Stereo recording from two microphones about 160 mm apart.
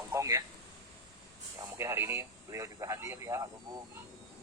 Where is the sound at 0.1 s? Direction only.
20° right (ahead or behind).